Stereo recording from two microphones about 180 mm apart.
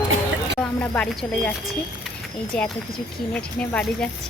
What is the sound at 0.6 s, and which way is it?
Speech, 5° left (ahead or behind).